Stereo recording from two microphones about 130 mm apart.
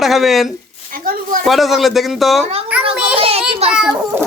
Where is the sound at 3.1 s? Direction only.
45° right (ahead or behind).